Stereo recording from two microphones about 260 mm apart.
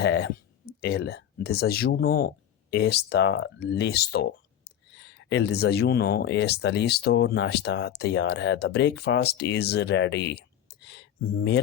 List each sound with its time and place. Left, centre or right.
0.0 s speech: left